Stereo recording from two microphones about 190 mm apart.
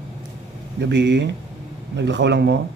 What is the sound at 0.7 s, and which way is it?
Speech, 65° right (ahead or behind).